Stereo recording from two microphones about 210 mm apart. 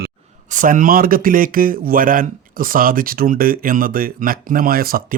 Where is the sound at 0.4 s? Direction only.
40° right (ahead or behind).